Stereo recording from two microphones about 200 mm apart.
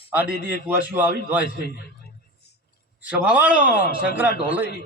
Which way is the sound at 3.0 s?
5° right (ahead or behind).